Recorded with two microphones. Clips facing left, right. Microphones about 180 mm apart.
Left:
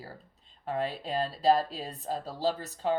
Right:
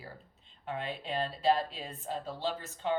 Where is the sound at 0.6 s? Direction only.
40° left (ahead or behind).